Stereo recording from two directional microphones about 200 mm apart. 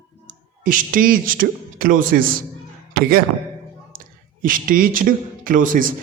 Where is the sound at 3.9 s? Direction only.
45° right (ahead or behind).